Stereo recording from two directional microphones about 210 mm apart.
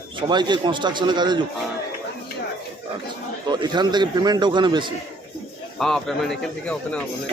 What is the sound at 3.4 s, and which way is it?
A man's voice, 20° right (ahead or behind).